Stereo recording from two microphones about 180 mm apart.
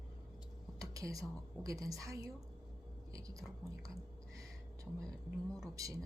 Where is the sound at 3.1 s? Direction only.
20° right (ahead or behind).